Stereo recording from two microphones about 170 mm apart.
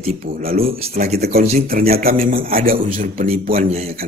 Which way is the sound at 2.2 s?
55° right (ahead or behind).